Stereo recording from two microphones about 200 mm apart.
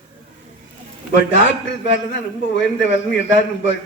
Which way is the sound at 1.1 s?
65° left (ahead or behind).